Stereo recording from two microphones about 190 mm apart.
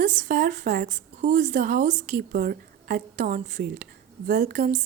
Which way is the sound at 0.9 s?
40° right (ahead or behind).